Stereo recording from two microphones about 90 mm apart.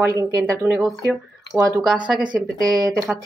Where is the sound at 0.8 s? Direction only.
Centre (ahead or behind).